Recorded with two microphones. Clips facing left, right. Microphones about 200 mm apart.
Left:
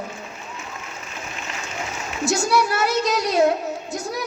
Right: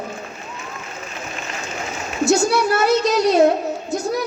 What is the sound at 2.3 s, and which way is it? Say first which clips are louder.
Speech: right 4 dB; 25° right (ahead or behind).